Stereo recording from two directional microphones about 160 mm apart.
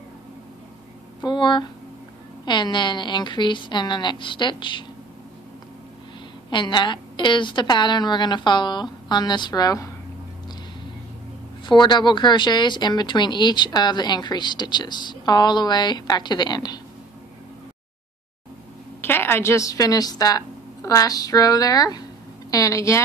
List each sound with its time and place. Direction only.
1.2 s a woman's voice: 30° left (ahead or behind)
6.5 s a woman's voice: 30° left (ahead or behind)
11.6 s a woman's voice: 30° left (ahead or behind)
18.9 s a woman's voice: 15° left (ahead or behind)